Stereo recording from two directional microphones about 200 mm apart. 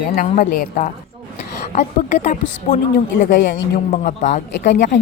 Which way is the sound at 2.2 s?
35° left (ahead or behind).